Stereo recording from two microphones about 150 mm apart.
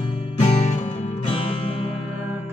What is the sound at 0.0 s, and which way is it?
Music, 35° left (ahead or behind).